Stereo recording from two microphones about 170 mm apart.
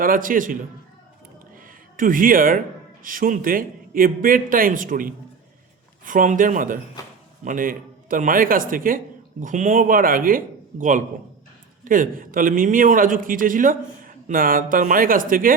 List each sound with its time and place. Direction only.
0.0 s a man's voice: 55° right (ahead or behind)
2.0 s a man's voice: 55° right (ahead or behind)